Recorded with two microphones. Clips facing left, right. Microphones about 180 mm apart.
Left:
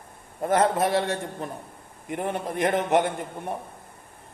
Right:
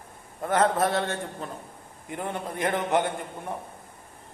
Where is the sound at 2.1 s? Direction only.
20° left (ahead or behind).